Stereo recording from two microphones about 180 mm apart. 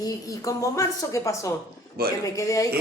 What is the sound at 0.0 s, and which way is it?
A woman's voice, 20° left (ahead or behind).